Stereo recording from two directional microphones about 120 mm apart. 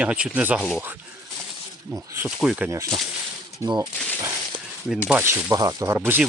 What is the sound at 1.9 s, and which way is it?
Speech, 20° right (ahead or behind).